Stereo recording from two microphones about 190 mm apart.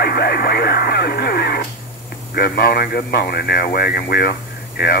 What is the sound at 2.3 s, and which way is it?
Speech, 55° left (ahead or behind).